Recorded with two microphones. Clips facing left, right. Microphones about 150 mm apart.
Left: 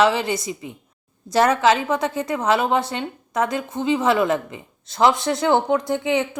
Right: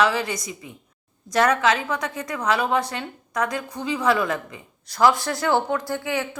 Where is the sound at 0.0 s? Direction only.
25° left (ahead or behind).